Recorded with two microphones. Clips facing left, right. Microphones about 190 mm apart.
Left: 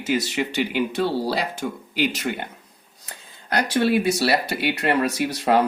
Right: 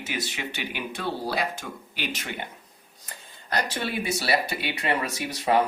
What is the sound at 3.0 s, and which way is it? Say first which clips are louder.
Speech: left 2 dB; 70° left (ahead or behind).